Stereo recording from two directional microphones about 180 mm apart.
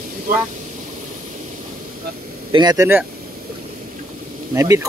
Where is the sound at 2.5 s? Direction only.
20° right (ahead or behind).